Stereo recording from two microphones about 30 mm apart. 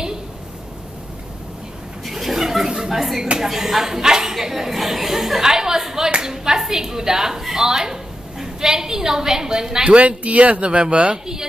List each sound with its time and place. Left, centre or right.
2.0 s a sound: centre
2.9 s a woman's voice: centre
5.4 s a woman's voice: centre
9.9 s speech: right